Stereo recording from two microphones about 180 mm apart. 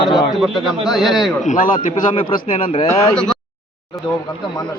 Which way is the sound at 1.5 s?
45° left (ahead or behind).